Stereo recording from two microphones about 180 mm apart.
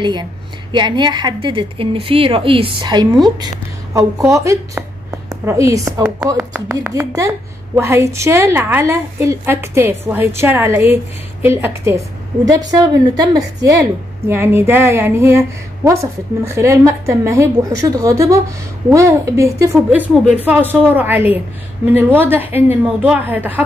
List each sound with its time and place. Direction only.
0.0 s a woman's voice: 25° right (ahead or behind); by 23.6 s 10° right (ahead or behind)